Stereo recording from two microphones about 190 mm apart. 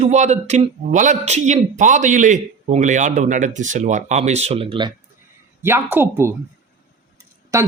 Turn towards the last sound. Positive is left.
turn(degrees=-15)  # may be behind; listen again after turning